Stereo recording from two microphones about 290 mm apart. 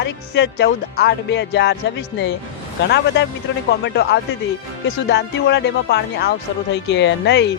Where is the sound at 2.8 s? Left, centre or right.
Left.